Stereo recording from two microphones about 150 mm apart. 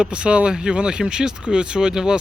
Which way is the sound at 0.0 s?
5° right (ahead or behind).